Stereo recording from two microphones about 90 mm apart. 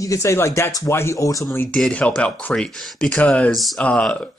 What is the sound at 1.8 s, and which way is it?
Speech, 15° left (ahead or behind).